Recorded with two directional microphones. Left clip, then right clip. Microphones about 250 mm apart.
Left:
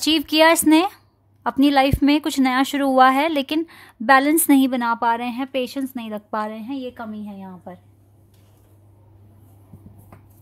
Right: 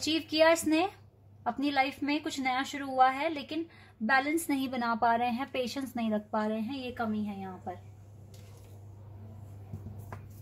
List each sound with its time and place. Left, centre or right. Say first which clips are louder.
0.0 s speech: left 10 dB; left